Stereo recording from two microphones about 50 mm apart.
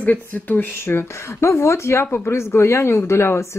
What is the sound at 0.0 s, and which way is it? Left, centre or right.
Speech, left.